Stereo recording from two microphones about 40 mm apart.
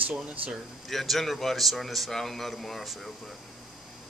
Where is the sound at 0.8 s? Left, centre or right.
Centre.